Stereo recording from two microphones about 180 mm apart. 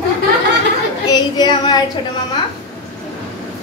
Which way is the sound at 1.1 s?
25° left (ahead or behind).